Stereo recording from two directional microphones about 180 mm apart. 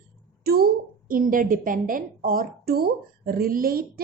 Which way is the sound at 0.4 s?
60° right (ahead or behind).